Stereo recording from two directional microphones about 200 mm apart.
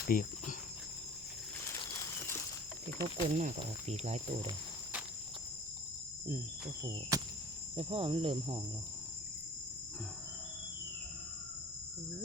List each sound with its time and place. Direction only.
0.1 s cricket: 45° left (ahead or behind)
1.6 s a sound: 15° left (ahead or behind)
3.2 s speech: 35° right (ahead or behind)
6.8 s cricket: 20° right (ahead or behind)